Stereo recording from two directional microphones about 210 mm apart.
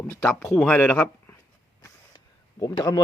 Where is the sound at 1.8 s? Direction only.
15° left (ahead or behind).